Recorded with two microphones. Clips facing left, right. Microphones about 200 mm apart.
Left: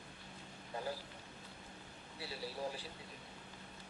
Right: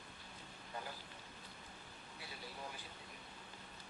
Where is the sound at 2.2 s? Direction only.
35° left (ahead or behind).